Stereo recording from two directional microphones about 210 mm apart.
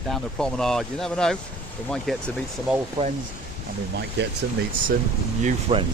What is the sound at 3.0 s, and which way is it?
Speech, 20° right (ahead or behind).